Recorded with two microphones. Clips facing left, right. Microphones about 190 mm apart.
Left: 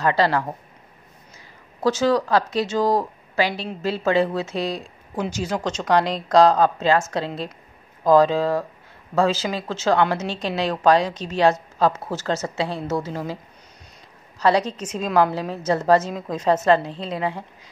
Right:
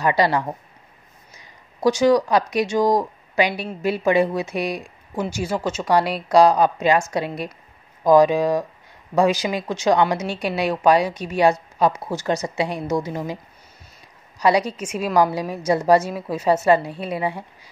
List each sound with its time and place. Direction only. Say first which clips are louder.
0.0 s a woman's voice: right 1 dB; 15° right (ahead or behind)
14.4 s a woman's voice: right 1 dB; 10° right (ahead or behind)